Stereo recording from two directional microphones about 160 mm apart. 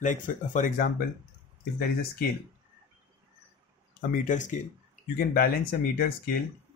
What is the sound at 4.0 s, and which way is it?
Speech, 70° left (ahead or behind).